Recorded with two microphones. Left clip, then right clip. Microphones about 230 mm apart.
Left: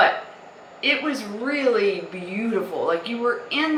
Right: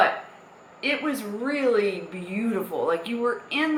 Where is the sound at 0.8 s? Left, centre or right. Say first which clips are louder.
Left 4 dB; centre.